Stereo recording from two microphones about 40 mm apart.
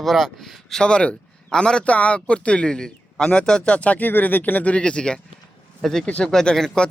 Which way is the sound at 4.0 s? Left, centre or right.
Left.